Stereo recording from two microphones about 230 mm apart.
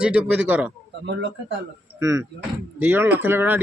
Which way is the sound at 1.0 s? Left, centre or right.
Right.